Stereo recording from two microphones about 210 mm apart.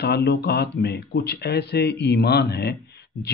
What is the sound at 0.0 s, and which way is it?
Speech, 50° left (ahead or behind).